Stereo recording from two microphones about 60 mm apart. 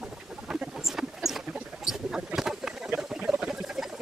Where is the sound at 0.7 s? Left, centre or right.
Centre.